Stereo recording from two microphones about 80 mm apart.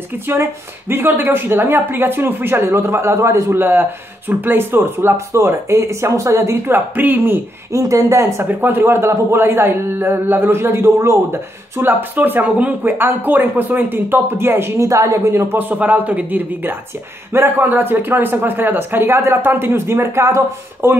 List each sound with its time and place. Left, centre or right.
0.3 s speech: right
7.0 s speech: right
7.7 s speech: right
8.5 s speech: right
11.7 s speech: right
14.9 s speech: right
15.4 s speech: right